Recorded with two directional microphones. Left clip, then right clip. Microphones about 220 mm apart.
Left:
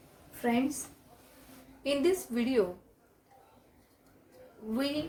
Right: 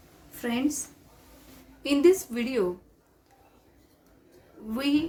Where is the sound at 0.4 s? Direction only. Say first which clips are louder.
Left 1 dB; 50° right (ahead or behind).